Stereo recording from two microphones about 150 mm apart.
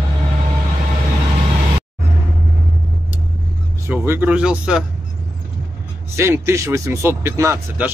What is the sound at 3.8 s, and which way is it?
Speech, 15° right (ahead or behind).